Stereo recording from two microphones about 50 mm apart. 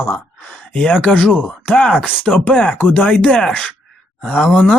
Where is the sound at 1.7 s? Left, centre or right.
Centre.